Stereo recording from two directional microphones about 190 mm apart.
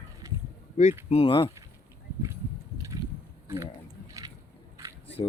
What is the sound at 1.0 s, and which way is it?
Speech, 30° left (ahead or behind).